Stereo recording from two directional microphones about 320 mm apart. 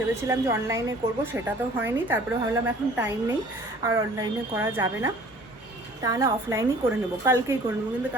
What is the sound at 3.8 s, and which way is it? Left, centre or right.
A woman's voice, centre.